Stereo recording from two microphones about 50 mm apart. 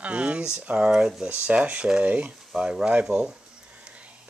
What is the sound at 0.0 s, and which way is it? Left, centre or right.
Speech, right.